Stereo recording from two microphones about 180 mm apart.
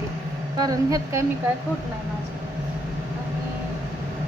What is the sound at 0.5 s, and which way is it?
Speech, 20° right (ahead or behind).